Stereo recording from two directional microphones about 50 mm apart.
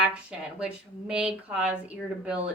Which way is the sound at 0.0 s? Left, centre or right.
Right.